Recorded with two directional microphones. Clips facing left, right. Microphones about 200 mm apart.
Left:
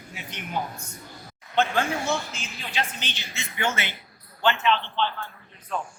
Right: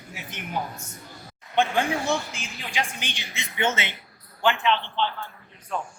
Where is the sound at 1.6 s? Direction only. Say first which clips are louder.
Right 1 dB; 15° right (ahead or behind).